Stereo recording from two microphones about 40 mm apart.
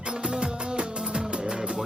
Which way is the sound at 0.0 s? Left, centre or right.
Right.